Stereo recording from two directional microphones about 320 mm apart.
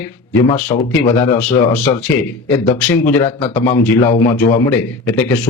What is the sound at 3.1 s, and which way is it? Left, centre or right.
Speech, centre.